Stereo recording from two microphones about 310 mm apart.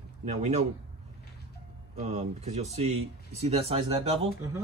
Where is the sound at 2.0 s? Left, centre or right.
Right.